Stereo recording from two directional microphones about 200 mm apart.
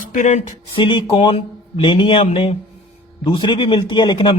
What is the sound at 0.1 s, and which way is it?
A man's voice, 40° left (ahead or behind).